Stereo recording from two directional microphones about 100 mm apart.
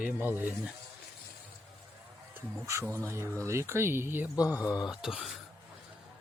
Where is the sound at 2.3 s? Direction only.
25° right (ahead or behind).